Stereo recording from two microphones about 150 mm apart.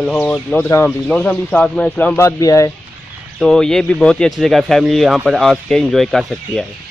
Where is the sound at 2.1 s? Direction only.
20° left (ahead or behind).